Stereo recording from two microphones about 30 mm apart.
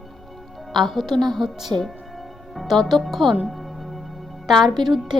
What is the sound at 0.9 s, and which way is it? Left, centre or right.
Speech, centre.